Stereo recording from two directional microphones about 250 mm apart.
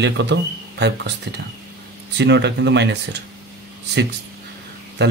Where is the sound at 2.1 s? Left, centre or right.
Right.